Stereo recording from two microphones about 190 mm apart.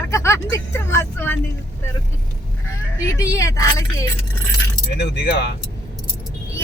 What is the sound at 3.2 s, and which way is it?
Speech, 15° left (ahead or behind).